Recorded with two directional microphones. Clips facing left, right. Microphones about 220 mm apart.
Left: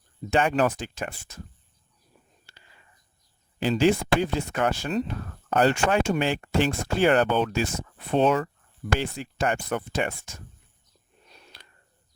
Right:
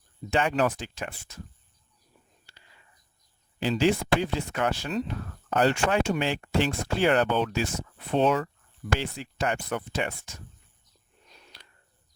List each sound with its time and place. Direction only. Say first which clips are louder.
0.3 s speech: left 2 dB; 50° left (ahead or behind)
3.6 s speech: left 3 dB; 50° left (ahead or behind)